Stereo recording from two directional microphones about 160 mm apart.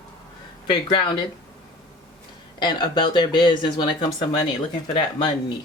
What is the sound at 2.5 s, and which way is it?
Speech, 25° left (ahead or behind).